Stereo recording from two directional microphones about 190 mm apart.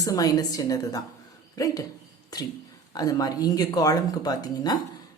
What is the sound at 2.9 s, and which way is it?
Speech, 20° left (ahead or behind).